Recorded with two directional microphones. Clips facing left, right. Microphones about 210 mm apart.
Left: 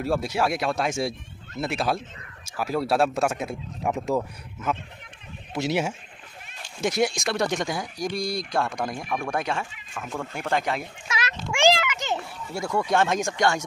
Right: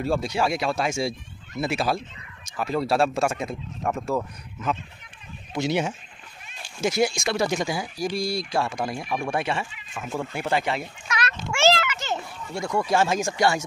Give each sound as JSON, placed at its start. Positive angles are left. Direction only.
{"t": 0.0, "sound": "speech", "side_deg": 5}
{"t": 3.9, "sound": "speech", "side_deg": 15}
{"t": 5.5, "sound": "speech", "side_deg": 5}
{"t": 11.1, "sound": "a sound", "side_deg": 25}
{"t": 11.5, "sound": "a sound", "side_deg": 15}
{"t": 12.6, "sound": "speech", "side_deg": 0}